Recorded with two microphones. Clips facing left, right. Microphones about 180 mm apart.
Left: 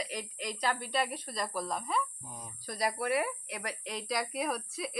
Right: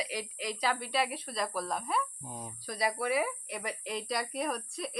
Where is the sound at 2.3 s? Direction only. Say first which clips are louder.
Right 4 dB; 25° right (ahead or behind).